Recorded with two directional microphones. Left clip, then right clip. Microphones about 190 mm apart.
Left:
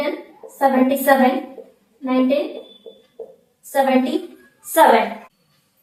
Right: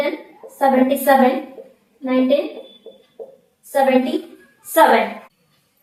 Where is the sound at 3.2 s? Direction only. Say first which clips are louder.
Even; 15° right (ahead or behind).